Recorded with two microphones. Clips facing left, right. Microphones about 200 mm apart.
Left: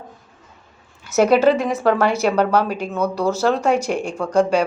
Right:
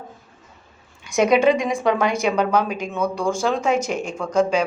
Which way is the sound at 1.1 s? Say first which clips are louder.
Left 2 dB; 5° left (ahead or behind).